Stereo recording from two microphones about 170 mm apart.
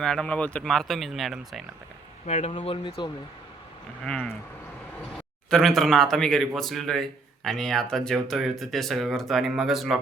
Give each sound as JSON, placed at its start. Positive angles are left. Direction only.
{"t": 0.0, "sound": "speech", "side_deg": 5}
{"t": 2.2, "sound": "speech", "side_deg": 45}
{"t": 4.0, "sound": "speech", "side_deg": 5}
{"t": 5.5, "sound": "speech", "side_deg": 0}